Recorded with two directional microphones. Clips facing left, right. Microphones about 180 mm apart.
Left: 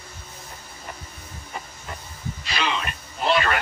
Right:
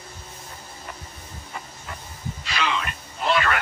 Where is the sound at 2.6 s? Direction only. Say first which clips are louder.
Even; 25° left (ahead or behind).